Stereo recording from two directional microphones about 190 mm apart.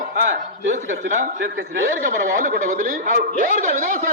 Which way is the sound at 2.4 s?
45° right (ahead or behind).